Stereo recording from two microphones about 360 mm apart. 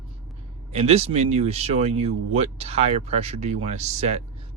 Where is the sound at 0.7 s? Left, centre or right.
Centre.